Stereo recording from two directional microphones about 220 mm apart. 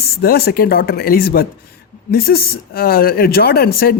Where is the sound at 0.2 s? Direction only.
45° left (ahead or behind).